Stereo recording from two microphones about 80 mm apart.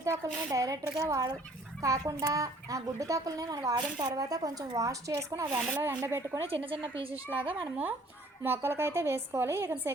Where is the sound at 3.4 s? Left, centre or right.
Right.